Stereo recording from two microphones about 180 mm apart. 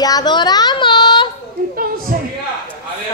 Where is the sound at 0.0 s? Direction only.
20° left (ahead or behind).